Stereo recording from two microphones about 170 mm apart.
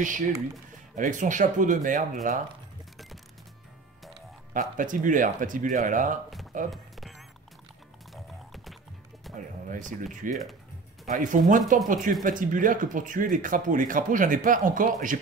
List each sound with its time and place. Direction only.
0.9 s speech: 50° right (ahead or behind)
4.6 s speech: 50° right (ahead or behind)
6.7 s a sound: centre (ahead or behind)
8.1 s music: centre (ahead or behind)
9.7 s speech: 50° right (ahead or behind)